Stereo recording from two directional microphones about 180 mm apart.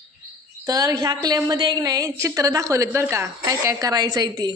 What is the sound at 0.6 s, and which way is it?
A woman's voice, 20° right (ahead or behind).